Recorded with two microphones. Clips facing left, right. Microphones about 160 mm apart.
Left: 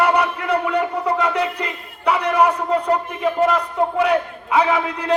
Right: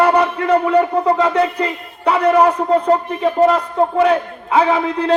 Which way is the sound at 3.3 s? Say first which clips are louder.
Right 5 dB; 30° right (ahead or behind).